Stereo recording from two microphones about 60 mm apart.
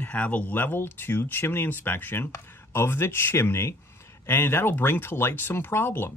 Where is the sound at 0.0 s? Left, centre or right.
Left.